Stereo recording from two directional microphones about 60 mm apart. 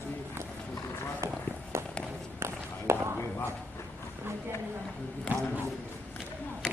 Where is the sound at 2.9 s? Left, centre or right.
Right.